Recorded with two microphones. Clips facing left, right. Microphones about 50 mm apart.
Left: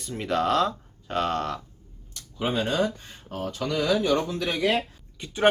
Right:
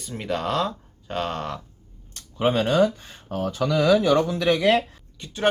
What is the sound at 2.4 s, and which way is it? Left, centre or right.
Speech, right.